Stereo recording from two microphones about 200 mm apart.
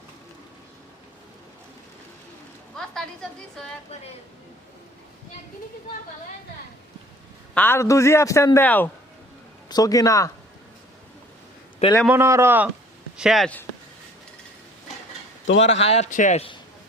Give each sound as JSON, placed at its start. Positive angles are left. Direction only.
{"t": 2.7, "sound": "a woman's voice", "side_deg": 0}
{"t": 7.5, "sound": "a man's voice", "side_deg": 10}
{"t": 12.0, "sound": "a woman's voice", "side_deg": -10}
{"t": 15.4, "sound": "a man's voice", "side_deg": 65}
{"t": 15.8, "sound": "a man's voice", "side_deg": 35}